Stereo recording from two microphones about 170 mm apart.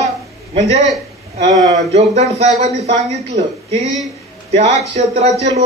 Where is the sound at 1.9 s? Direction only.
40° right (ahead or behind).